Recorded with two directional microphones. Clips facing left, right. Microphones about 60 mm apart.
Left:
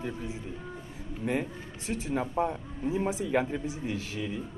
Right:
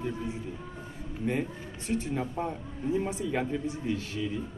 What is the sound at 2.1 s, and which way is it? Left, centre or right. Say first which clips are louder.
Speech: left 3 dB; centre.